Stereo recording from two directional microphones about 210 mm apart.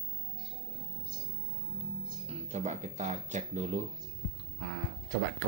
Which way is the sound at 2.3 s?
30° right (ahead or behind).